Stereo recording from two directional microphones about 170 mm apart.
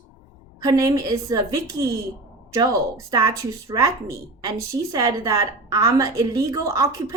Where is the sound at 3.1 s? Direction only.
20° right (ahead or behind).